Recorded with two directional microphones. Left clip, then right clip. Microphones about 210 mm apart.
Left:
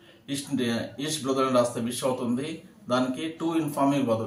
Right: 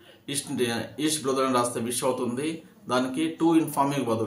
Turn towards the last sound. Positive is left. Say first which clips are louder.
# left 1 dB
turn(degrees=-50)  # may be behind; listen again after turning